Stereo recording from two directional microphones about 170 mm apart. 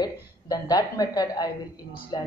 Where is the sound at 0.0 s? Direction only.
20° left (ahead or behind).